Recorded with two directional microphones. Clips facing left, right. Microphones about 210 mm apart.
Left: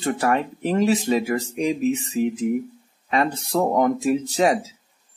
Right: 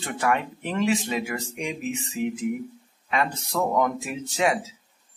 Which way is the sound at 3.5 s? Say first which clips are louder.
Left 4 dB; 35° left (ahead or behind).